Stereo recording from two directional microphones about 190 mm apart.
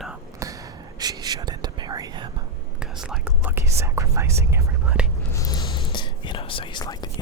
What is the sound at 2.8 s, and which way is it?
Whispering, 5° right (ahead or behind).